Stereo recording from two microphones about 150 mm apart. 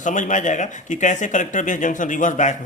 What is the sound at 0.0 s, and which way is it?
Speech, 55° left (ahead or behind).